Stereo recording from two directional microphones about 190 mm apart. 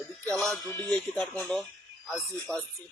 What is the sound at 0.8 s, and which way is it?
Speech, 5° left (ahead or behind).